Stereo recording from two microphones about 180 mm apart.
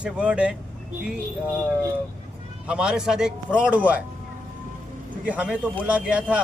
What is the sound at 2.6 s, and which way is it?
Speech, 5° right (ahead or behind).